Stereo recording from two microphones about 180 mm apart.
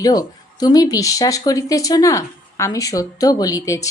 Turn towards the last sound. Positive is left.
turn(degrees=15)  # may be behind; listen again after turning